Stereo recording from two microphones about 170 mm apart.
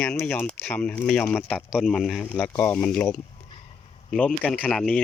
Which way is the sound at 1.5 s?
5° right (ahead or behind).